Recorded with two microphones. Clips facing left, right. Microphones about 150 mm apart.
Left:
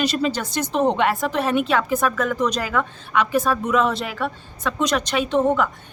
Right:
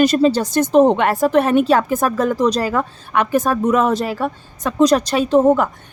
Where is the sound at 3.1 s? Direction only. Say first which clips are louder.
Right 3 dB; 50° right (ahead or behind).